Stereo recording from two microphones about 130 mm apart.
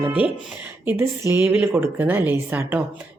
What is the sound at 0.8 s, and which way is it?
Speech, 15° right (ahead or behind).